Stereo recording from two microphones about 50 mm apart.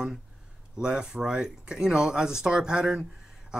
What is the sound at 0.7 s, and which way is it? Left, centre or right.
Speech, centre.